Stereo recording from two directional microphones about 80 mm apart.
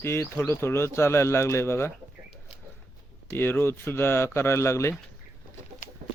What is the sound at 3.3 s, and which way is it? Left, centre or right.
Speech, left.